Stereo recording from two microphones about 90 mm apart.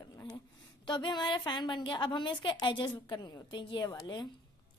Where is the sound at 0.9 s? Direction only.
55° left (ahead or behind).